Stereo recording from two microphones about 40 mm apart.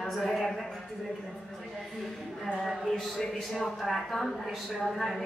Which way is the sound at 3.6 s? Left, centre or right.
Centre.